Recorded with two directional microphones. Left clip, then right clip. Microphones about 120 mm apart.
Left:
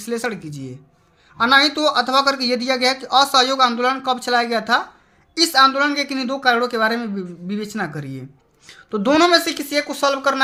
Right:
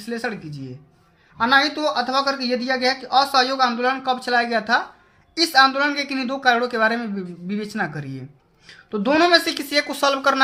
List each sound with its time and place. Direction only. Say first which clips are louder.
0.0 s a woman's voice: left 3 dB; 40° left (ahead or behind); by 10.4 s centre (ahead or behind)